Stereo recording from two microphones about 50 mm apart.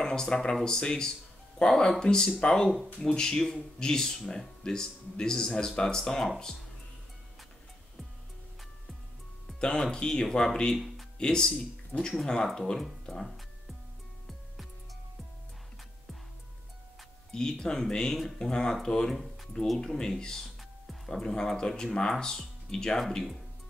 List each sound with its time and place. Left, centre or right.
0.0 s speech: centre
9.6 s speech: centre
13.0 s music: centre
17.3 s speech: centre